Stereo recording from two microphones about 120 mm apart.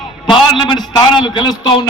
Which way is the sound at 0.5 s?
40° left (ahead or behind).